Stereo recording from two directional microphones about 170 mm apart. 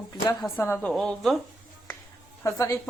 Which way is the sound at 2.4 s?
20° left (ahead or behind).